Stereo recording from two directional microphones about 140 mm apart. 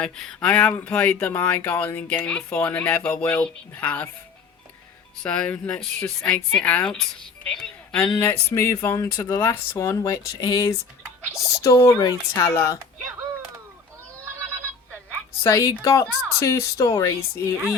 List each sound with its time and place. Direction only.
0.0 s speech: 5° left (ahead or behind)
5.2 s speech: 10° left (ahead or behind)
8.1 s speech: 20° left (ahead or behind)
15.4 s speech: 20° left (ahead or behind)